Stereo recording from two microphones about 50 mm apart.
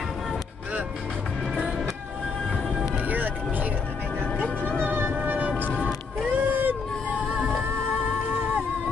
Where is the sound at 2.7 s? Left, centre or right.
Centre.